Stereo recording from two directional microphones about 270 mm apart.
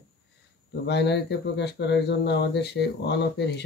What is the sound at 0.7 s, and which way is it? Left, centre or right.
Speech, left.